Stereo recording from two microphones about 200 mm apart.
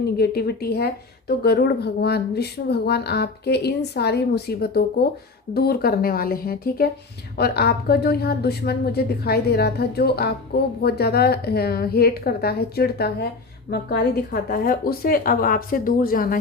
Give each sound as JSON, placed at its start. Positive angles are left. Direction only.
{"t": 0.2, "sound": "a woman's voice", "side_deg": 50}
{"t": 14.5, "sound": "a woman's voice", "side_deg": 45}